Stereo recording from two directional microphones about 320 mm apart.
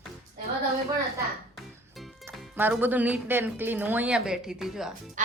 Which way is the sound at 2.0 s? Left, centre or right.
Centre.